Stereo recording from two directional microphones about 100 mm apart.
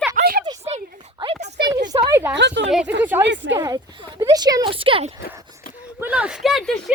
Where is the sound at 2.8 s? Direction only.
20° right (ahead or behind).